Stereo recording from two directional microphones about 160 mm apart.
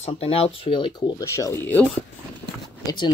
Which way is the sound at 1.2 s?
15° left (ahead or behind).